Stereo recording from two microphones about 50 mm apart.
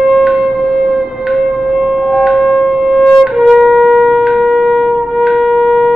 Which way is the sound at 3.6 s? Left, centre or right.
Centre.